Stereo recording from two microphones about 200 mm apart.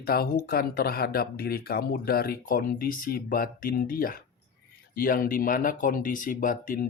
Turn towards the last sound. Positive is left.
turn(degrees=40)  # may be behind; listen again after turning